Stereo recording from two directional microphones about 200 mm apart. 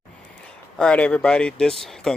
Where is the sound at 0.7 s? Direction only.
5° left (ahead or behind).